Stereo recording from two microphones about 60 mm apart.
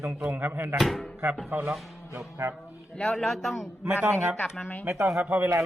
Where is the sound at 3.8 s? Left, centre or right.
Right.